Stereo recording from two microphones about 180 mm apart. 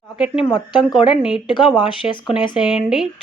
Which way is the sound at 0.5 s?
25° left (ahead or behind).